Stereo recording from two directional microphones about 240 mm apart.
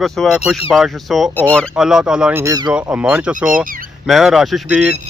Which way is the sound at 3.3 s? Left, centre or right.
Right.